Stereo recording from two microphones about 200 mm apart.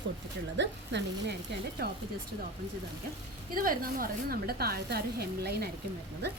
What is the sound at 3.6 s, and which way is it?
A woman's voice, 45° right (ahead or behind).